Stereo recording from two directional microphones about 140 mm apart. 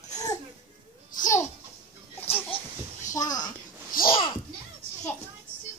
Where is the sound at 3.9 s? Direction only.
85° left.